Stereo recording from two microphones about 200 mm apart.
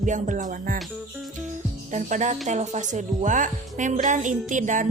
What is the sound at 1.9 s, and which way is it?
A woman's voice, 35° right (ahead or behind).